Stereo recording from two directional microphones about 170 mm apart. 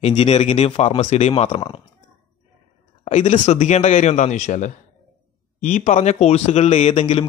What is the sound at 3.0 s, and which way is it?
Speech, 45° left (ahead or behind).